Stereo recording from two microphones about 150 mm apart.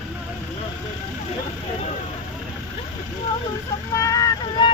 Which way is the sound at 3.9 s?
20° left (ahead or behind).